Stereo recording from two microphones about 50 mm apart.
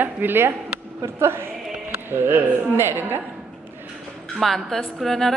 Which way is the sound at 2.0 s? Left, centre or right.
Right.